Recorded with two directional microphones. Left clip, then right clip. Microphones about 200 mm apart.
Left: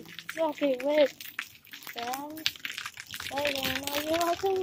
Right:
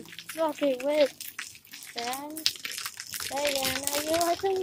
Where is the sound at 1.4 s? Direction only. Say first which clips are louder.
Left 2 dB; 15° right (ahead or behind).